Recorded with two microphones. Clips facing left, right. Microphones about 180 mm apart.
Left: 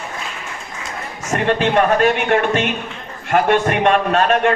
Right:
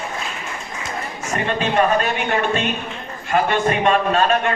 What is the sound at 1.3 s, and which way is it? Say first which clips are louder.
A man's voice: left 3 dB; 65° left (ahead or behind).